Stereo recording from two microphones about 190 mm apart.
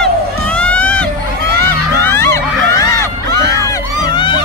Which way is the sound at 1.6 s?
10° left (ahead or behind).